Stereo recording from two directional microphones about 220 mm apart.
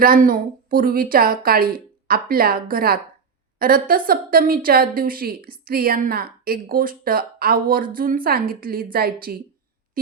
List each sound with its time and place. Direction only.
0.0 s a woman's voice: 40° right (ahead or behind)